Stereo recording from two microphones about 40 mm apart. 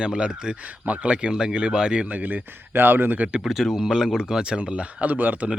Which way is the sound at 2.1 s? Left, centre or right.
Right.